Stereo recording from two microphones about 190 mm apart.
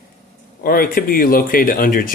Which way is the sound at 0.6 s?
50° left (ahead or behind).